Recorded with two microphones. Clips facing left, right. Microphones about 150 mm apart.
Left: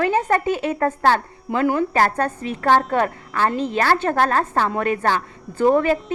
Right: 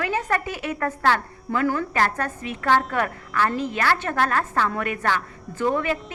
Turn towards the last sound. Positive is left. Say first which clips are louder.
# left 7 dB
turn(degrees=35)  # may be behind; listen again after turning